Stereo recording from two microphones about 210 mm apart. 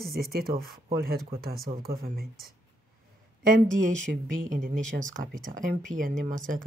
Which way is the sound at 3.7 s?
40° right (ahead or behind).